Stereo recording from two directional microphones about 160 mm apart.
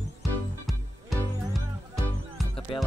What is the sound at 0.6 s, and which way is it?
Music, centre (ahead or behind).